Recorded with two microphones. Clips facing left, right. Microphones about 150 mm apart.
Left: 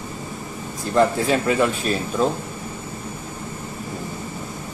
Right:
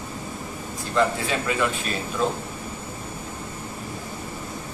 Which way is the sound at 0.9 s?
40° left (ahead or behind).